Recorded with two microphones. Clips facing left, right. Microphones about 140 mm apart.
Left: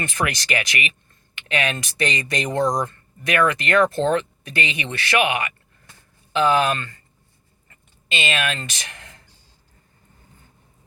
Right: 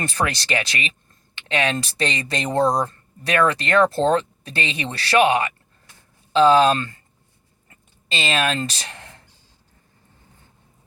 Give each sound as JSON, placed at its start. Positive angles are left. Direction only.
{"t": 0.0, "sound": "speech", "side_deg": -30}
{"t": 8.1, "sound": "speech", "side_deg": -35}